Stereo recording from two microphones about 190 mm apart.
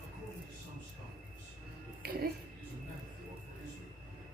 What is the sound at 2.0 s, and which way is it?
Music, 55° right (ahead or behind).